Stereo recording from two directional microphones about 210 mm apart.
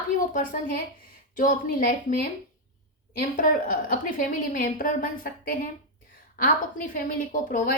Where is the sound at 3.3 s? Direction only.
40° left (ahead or behind).